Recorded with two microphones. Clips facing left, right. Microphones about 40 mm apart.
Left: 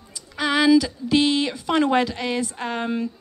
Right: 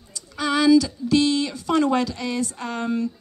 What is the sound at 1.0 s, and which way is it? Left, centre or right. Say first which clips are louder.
A woman's voice: even; left.